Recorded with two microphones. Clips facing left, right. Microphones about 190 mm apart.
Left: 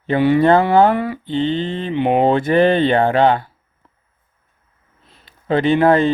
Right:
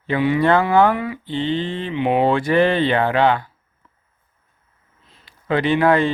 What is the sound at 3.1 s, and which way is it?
Speech, 40° left (ahead or behind).